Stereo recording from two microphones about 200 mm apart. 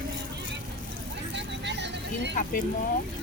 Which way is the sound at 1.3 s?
60° right (ahead or behind).